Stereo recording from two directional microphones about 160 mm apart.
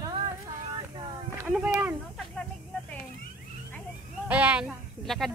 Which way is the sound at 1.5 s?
10° right (ahead or behind).